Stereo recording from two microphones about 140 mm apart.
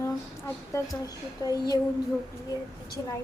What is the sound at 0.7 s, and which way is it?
Speech, 25° left (ahead or behind).